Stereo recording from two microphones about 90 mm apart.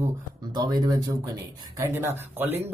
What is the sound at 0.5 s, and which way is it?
Speech, 50° right (ahead or behind).